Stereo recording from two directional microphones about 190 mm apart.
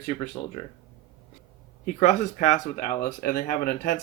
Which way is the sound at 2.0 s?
40° left (ahead or behind).